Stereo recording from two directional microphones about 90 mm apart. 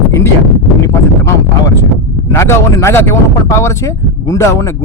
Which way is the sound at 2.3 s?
30° left (ahead or behind).